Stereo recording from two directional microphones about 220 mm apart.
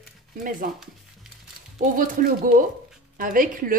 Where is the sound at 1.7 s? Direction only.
40° right (ahead or behind).